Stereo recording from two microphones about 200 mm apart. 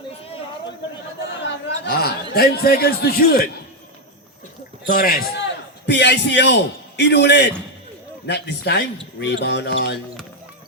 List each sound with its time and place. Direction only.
1.8 s a man's voice: 55° left (ahead or behind)
4.9 s a man's voice: 45° left (ahead or behind)